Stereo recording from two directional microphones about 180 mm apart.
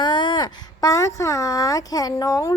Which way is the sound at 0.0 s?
25° left (ahead or behind).